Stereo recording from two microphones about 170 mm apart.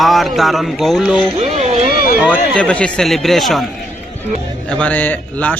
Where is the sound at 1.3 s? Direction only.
40° right (ahead or behind).